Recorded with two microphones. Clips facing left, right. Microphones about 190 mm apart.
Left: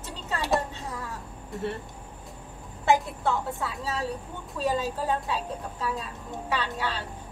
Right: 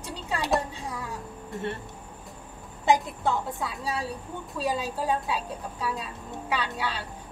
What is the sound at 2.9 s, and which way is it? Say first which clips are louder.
A woman's voice: even; 15° right (ahead or behind).